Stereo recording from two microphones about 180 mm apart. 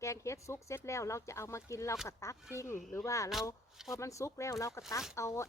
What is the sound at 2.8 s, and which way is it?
Speech, centre (ahead or behind).